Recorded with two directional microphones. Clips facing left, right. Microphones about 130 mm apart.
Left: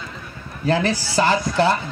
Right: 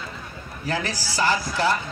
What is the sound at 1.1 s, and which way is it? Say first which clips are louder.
Speech: left 5 dB; 25° left (ahead or behind).